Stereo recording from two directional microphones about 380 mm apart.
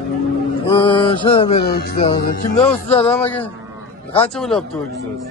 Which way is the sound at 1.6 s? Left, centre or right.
Left.